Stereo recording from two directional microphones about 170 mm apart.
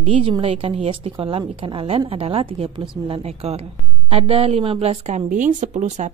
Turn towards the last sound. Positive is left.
turn(degrees=-45)  # may be behind; listen again after turning